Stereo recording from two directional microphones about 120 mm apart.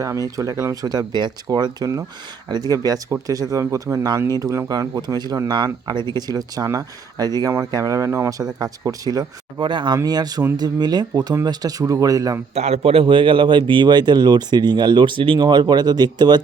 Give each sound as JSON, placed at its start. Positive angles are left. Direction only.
{"t": 0.0, "sound": "speech", "side_deg": -30}
{"t": 12.5, "sound": "speech", "side_deg": -60}